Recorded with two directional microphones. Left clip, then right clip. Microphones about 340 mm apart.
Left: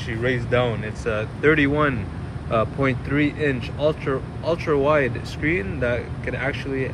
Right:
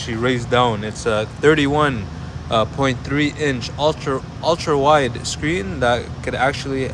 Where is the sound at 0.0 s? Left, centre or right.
Centre.